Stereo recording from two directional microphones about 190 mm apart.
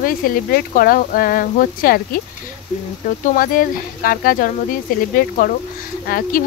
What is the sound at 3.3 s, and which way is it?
Speech, 45° left (ahead or behind).